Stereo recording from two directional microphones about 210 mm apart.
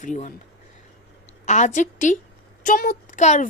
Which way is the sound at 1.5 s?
35° left (ahead or behind).